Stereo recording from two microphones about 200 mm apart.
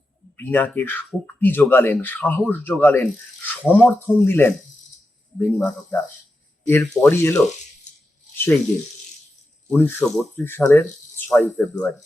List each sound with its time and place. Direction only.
0.3 s speech: 10° left (ahead or behind)
7.9 s a sound: 35° left (ahead or behind)
9.6 s speech: 5° left (ahead or behind)